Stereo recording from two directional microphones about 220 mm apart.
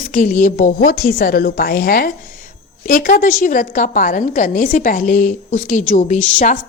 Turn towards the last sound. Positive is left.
turn(degrees=35)  # may be behind; listen again after turning